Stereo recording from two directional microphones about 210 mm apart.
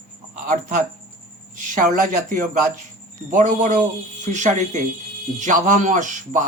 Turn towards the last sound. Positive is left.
turn(degrees=-35)  # may be behind; listen again after turning